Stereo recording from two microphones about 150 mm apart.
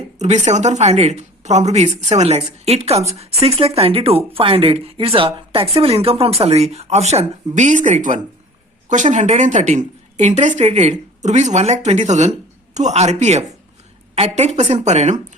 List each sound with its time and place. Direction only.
0.2 s speech: 50° right (ahead or behind)